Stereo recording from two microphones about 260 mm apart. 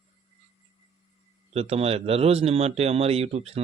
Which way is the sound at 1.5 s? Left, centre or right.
Right.